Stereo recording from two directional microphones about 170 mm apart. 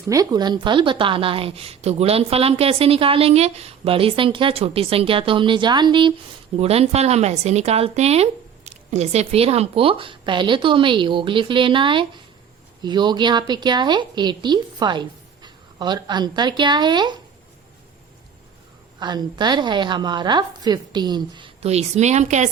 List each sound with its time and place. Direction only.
0.1 s a woman's voice: 20° right (ahead or behind)
18.9 s a woman's voice: 25° right (ahead or behind); by 22.4 s 40° right (ahead or behind)